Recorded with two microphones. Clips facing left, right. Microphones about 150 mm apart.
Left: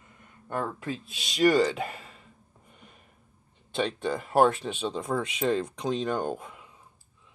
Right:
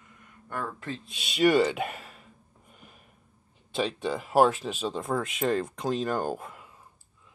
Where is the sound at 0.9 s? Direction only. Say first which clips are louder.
Left 2 dB; centre (ahead or behind).